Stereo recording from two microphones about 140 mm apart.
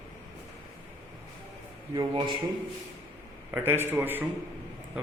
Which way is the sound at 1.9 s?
30° right (ahead or behind).